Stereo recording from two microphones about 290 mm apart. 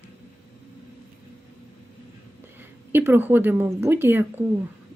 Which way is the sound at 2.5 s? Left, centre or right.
Centre.